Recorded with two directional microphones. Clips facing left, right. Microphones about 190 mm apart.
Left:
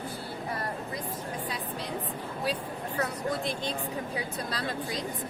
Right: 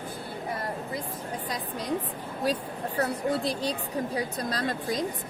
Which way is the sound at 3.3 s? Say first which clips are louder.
Right 4 dB; 35° right (ahead or behind).